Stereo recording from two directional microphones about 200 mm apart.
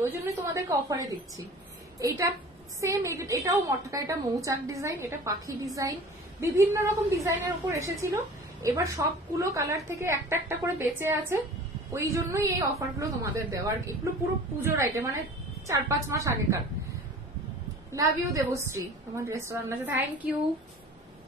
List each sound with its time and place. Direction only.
0.0 s a woman's voice: 15° right (ahead or behind)
17.9 s a woman's voice: 15° right (ahead or behind)